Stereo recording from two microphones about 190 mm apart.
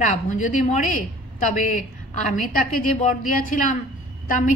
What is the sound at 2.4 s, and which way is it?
A woman's voice, 45° left (ahead or behind).